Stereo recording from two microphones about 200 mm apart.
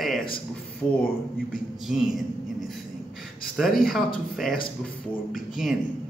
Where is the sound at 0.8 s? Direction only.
10° left (ahead or behind).